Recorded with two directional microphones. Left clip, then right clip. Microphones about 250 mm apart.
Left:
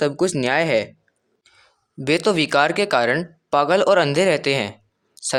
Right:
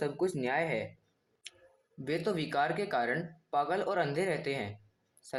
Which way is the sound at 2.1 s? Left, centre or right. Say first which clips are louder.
Left 15 dB; left.